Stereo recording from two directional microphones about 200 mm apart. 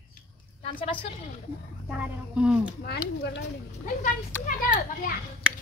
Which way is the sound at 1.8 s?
5° right (ahead or behind).